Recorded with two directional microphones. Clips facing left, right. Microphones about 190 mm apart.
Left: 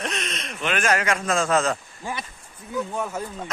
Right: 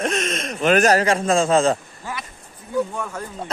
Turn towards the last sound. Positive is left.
turn(degrees=20)  # may be behind; listen again after turning